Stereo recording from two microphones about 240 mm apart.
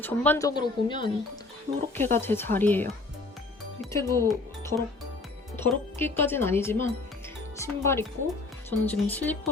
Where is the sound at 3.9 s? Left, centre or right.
Centre.